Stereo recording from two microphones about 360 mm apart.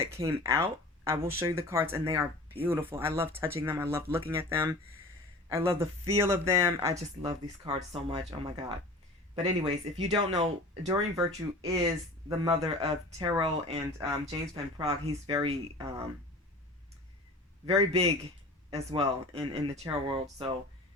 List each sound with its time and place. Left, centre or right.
0.0 s speech: centre
17.7 s speech: centre